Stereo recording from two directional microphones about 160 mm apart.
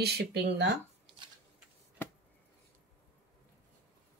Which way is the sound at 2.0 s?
15° left (ahead or behind).